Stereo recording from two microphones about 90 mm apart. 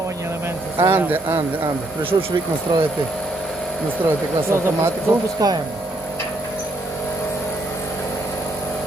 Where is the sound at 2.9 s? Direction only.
10° left (ahead or behind).